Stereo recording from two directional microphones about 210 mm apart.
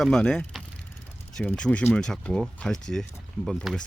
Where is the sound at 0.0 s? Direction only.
5° left (ahead or behind).